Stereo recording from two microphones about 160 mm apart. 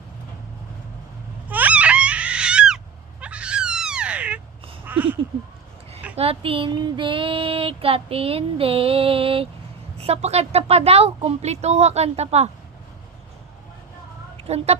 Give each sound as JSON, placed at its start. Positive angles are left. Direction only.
{"t": 1.5, "sound": "crying", "side_deg": -10}
{"t": 4.9, "sound": "a sound", "side_deg": -10}
{"t": 6.1, "sound": "child singing", "side_deg": -35}
{"t": 14.3, "sound": "speech", "side_deg": -40}